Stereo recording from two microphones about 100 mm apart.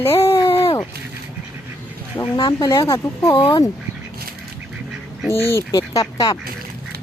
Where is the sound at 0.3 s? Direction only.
30° left (ahead or behind).